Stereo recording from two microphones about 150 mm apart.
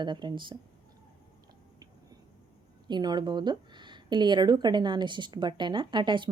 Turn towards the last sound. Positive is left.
turn(degrees=-30)  # may be behind; listen again after turning